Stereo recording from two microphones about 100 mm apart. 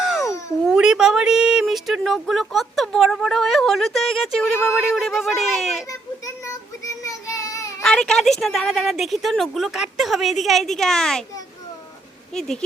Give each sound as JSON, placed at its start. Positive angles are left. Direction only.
{"t": 0.0, "sound": "babbling", "side_deg": 0}
{"t": 0.6, "sound": "a woman's voice", "side_deg": -5}
{"t": 5.9, "sound": "child singing", "side_deg": 30}
{"t": 7.8, "sound": "a woman's voice", "side_deg": 5}
{"t": 12.3, "sound": "a woman's voice", "side_deg": 5}